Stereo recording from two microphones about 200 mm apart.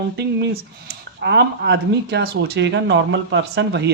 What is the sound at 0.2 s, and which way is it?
Speech, 55° right (ahead or behind).